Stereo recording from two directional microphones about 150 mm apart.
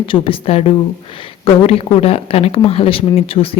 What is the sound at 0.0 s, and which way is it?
Speech, 40° left (ahead or behind).